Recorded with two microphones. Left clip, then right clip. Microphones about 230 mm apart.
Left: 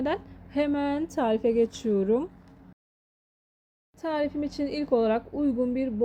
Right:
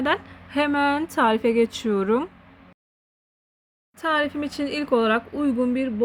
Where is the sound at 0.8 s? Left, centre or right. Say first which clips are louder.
Right 7 dB; centre.